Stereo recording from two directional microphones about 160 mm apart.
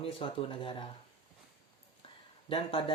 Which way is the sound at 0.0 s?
35° left (ahead or behind).